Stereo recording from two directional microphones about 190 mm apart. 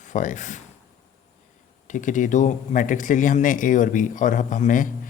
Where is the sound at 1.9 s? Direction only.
40° left (ahead or behind).